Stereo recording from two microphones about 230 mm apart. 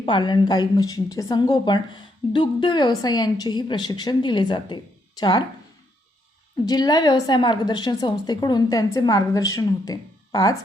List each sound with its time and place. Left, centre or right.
0.0 s a woman's voice: left
6.7 s a woman's voice: centre